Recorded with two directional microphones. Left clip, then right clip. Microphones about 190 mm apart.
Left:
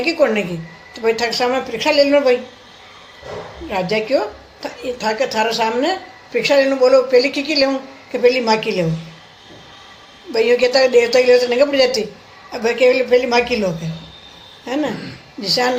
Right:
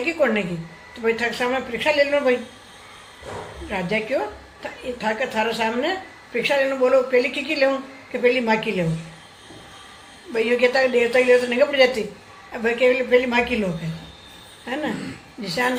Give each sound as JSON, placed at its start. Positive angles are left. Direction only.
{"t": 0.0, "sound": "a woman's voice", "side_deg": 40}
{"t": 3.7, "sound": "a woman's voice", "side_deg": 45}
{"t": 10.3, "sound": "a woman's voice", "side_deg": 45}
{"t": 15.4, "sound": "a woman's voice", "side_deg": 45}